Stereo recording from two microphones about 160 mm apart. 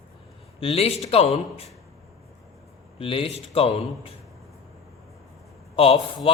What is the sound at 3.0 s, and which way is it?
Speech, 35° left (ahead or behind).